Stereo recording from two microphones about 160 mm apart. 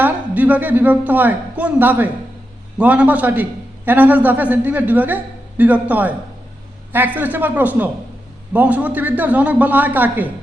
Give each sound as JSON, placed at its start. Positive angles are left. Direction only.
{"t": 0.0, "sound": "a woman's voice", "side_deg": -10}